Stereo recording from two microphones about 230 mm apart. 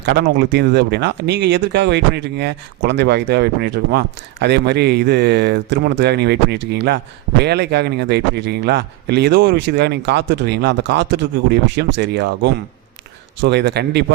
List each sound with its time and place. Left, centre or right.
0.0 s speech: right